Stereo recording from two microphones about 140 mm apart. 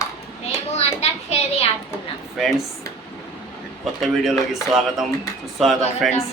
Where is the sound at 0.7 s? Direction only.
50° left (ahead or behind).